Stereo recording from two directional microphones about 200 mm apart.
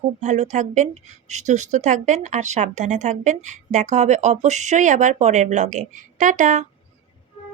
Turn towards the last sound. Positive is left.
turn(degrees=-40)  # may be behind; listen again after turning